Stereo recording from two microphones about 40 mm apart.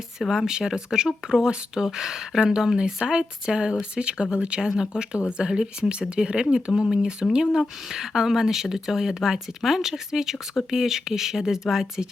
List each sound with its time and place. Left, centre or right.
0.2 s speech: centre